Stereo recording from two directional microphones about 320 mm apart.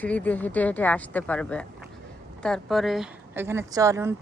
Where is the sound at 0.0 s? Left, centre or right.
Centre.